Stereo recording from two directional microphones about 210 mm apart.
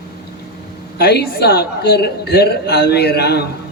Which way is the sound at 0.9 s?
50° left (ahead or behind).